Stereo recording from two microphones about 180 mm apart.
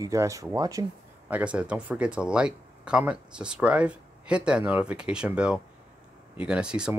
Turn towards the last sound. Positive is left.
turn(degrees=-5)  # may be behind; listen again after turning